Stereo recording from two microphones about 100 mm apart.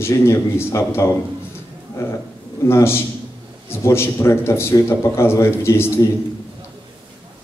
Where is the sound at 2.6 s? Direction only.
25° left (ahead or behind).